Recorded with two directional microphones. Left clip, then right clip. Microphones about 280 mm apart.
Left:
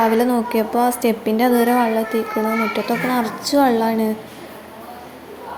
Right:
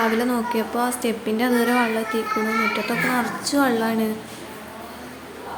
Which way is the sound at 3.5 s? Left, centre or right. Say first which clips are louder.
Left 5 dB; centre.